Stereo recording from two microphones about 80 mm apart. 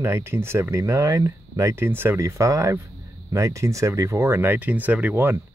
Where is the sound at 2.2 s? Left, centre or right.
Right.